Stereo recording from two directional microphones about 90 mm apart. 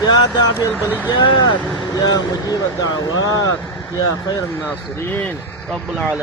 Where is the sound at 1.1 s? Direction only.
55° left (ahead or behind).